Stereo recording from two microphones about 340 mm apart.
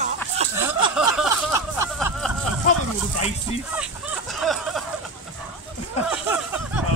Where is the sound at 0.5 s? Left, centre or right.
Centre.